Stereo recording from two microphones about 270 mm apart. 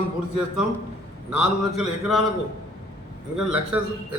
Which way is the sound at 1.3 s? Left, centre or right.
Centre.